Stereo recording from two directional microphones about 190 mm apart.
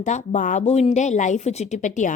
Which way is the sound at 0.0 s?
40° left (ahead or behind).